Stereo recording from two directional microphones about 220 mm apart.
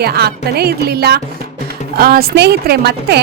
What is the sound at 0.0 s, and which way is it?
Speech, 45° right (ahead or behind).